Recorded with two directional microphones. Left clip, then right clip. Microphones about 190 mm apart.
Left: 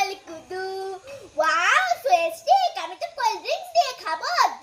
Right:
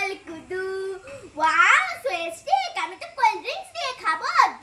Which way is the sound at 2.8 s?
15° right (ahead or behind).